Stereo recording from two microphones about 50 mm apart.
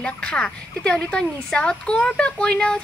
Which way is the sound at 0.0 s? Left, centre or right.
Centre.